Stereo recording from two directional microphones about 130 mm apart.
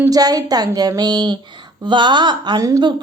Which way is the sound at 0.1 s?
30° right (ahead or behind).